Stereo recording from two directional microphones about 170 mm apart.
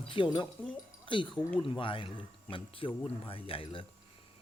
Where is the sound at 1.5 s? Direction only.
30° left (ahead or behind).